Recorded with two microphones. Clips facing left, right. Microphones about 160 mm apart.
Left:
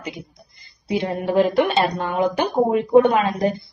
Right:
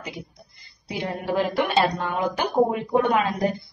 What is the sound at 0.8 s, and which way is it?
A woman's voice, 20° left (ahead or behind).